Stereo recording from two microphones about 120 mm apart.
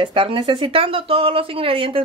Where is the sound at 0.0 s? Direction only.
45° right (ahead or behind).